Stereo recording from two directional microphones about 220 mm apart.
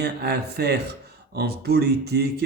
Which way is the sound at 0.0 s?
50° right (ahead or behind).